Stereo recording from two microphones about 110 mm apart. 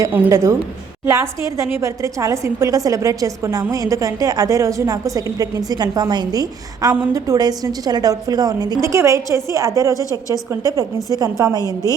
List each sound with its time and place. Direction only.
0.1 s a woman's voice: 20° right (ahead or behind)
10.0 s a woman's voice: 30° left (ahead or behind)
10.5 s a woman's voice: 30° right (ahead or behind)